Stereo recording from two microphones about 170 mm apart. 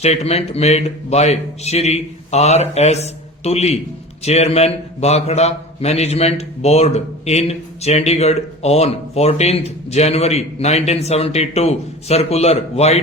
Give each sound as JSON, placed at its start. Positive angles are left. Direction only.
{"t": 0.0, "sound": "a man's voice", "side_deg": 40}